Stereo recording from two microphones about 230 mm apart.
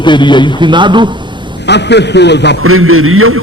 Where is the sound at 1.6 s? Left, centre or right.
Left.